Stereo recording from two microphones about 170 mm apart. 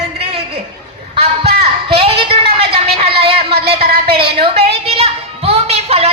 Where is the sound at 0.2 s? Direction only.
35° right (ahead or behind).